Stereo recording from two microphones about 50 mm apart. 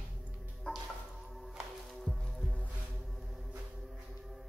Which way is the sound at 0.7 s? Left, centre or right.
Left.